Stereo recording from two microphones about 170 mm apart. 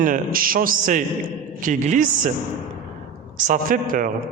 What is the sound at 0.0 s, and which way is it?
A man's voice, 55° right (ahead or behind).